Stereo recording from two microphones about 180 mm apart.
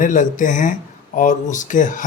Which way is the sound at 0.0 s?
45° left (ahead or behind).